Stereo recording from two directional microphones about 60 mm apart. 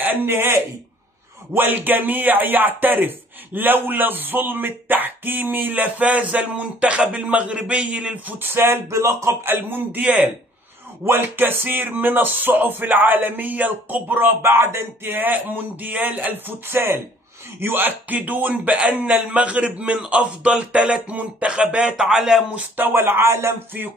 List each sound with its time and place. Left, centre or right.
0.0 s speech: right
8.4 s speech: right
16.6 s speech: right; by 20.0 s centre
20.1 s a sound: right
22.8 s speech: right